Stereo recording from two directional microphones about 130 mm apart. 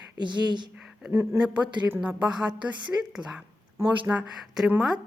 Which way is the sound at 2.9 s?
20° right (ahead or behind).